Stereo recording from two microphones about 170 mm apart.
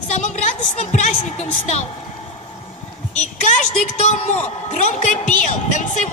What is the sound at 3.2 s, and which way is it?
A woman's voice, 45° left (ahead or behind).